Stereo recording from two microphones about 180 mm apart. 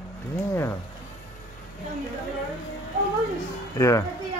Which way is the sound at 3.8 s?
15° left (ahead or behind).